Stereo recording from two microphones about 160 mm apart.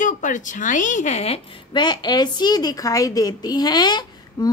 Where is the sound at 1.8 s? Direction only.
25° left (ahead or behind).